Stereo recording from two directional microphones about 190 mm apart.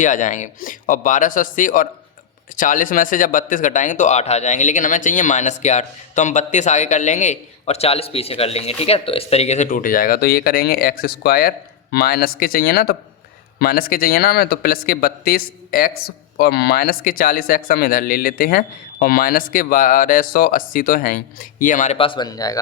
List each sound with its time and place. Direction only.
0.0 s speech: 40° left (ahead or behind); by 22.6 s 20° left (ahead or behind)